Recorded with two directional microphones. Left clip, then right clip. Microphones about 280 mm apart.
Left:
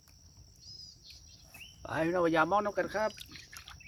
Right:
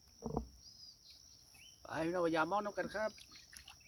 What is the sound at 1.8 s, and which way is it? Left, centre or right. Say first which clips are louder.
Speech: left 7 dB; centre.